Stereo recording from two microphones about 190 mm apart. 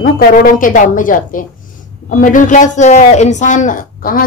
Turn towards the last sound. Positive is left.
turn(degrees=45)  # may be behind; listen again after turning